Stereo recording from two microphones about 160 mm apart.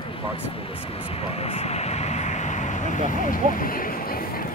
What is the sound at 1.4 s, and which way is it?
Vehicle, 40° left (ahead or behind).